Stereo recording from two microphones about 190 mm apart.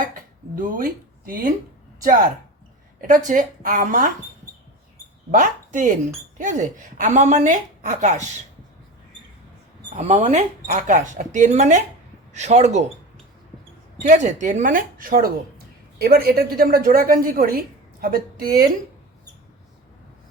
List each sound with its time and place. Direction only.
0.1 s speech: 45° right (ahead or behind)
5.3 s a woman's voice: 45° right (ahead or behind)
9.9 s a woman's voice: 35° right (ahead or behind)
14.1 s speech: 40° right (ahead or behind)